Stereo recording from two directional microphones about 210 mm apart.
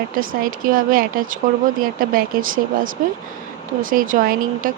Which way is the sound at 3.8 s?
40° right (ahead or behind).